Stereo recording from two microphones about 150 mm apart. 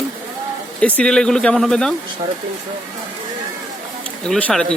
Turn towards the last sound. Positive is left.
turn(degrees=5)  # may be behind; listen again after turning